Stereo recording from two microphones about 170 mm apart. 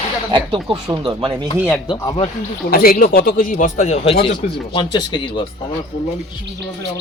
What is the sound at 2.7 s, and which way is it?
Speech, 60° left (ahead or behind).